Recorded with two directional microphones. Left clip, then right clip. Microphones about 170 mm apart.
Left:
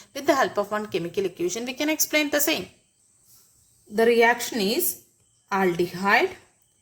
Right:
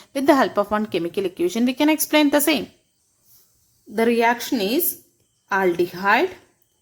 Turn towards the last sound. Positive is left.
turn(degrees=-45)  # may be behind; listen again after turning